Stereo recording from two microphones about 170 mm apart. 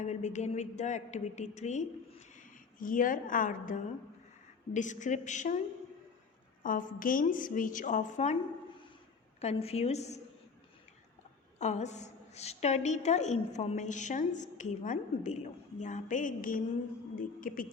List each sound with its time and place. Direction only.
0.0 s a woman's voice: 45° left (ahead or behind)
6.6 s a woman's voice: 50° left (ahead or behind)
9.4 s a woman's voice: 40° left (ahead or behind)
11.6 s a woman's voice: 40° left (ahead or behind)